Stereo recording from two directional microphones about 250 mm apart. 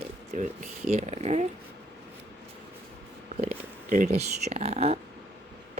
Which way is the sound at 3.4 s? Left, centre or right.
Right.